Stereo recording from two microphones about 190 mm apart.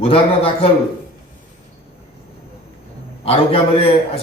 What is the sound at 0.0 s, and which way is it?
Speech, 30° left (ahead or behind).